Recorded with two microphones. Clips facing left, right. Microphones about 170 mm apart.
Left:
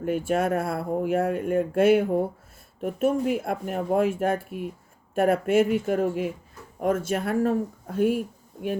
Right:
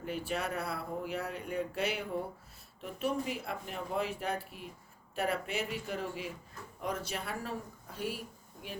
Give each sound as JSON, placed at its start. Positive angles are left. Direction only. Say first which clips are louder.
{"t": 0.0, "sound": "speech", "louder": "left 12 dB", "side_deg": 50}